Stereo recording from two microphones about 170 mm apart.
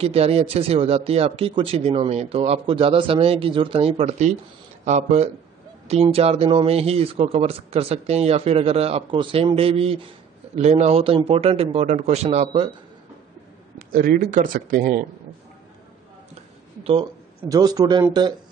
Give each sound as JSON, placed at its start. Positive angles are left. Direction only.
{"t": 0.0, "sound": "a man's voice", "side_deg": -35}
{"t": 13.7, "sound": "speech", "side_deg": -55}
{"t": 16.8, "sound": "speech", "side_deg": -30}